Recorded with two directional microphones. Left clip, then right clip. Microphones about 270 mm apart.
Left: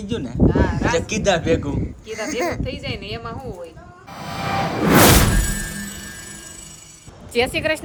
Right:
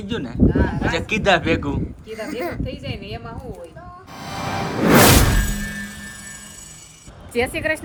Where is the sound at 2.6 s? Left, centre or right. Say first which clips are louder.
Left 3 dB; centre.